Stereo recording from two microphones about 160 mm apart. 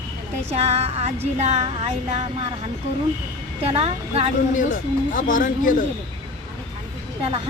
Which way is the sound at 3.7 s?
40° right (ahead or behind).